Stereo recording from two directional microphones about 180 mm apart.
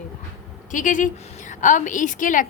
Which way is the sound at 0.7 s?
45° left (ahead or behind).